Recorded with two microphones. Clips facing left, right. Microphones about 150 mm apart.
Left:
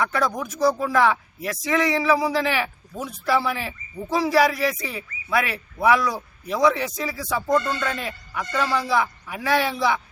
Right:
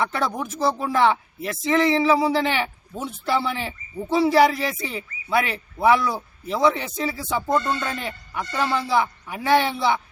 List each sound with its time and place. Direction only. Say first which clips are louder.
0.0 s speech: left 1 dB; 25° right (ahead or behind)